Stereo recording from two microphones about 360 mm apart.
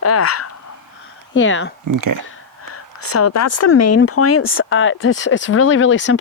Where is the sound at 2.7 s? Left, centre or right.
Left.